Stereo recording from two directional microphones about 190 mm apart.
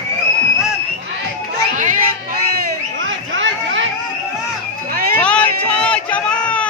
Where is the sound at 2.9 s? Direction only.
85° right.